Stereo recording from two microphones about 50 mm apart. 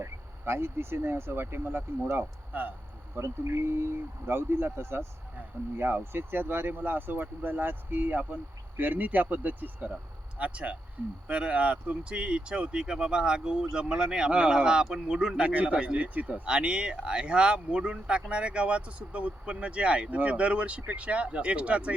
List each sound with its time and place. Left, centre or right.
0.0 s speech: right
2.1 s speech: right
3.2 s speech: right
16.2 s speech: centre